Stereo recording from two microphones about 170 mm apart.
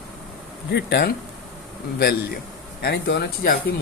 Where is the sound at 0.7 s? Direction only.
80° left.